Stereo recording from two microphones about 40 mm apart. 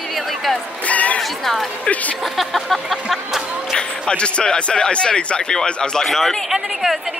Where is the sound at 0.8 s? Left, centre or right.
Left.